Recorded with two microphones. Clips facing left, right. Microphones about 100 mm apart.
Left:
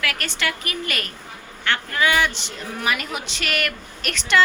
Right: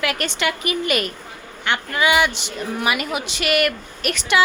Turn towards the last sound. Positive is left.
turn(degrees=-10)  # may be behind; listen again after turning